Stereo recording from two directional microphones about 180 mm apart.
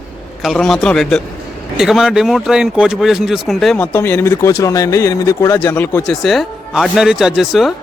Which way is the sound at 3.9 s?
10° left (ahead or behind).